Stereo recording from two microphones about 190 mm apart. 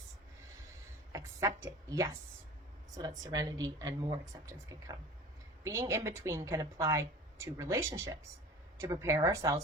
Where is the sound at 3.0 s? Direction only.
20° right (ahead or behind).